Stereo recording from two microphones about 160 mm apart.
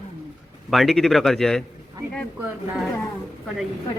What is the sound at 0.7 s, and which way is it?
Speech, centre (ahead or behind).